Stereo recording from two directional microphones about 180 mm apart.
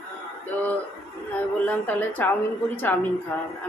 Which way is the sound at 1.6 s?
10° left (ahead or behind).